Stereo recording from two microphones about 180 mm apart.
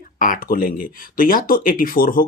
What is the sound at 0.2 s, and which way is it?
Speech, 50° left (ahead or behind).